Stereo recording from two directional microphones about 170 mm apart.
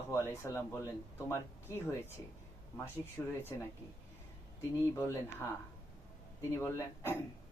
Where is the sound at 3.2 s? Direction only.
10° left (ahead or behind).